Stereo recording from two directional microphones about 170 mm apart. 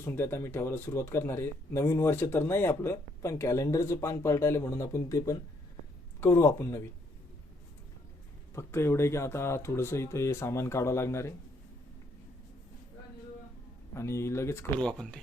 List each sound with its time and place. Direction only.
0.0 s speech: 15° left (ahead or behind)
8.5 s speech: 15° left (ahead or behind)
13.9 s speech: 15° left (ahead or behind)
14.8 s speech: 5° left (ahead or behind)